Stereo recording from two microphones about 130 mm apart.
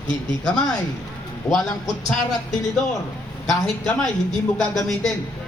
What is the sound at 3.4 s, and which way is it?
A man's voice, 5° left (ahead or behind).